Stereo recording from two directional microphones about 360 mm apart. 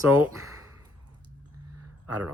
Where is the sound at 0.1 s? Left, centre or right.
Right.